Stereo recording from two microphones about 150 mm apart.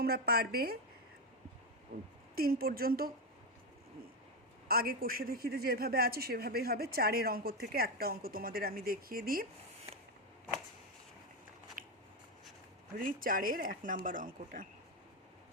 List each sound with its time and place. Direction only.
0.0 s a man's voice: 90° right
2.3 s a woman's voice: 85° right
4.7 s a man's voice: 85° right
11.8 s scissors: 65° right (ahead or behind)
13.0 s speech: 70° right (ahead or behind)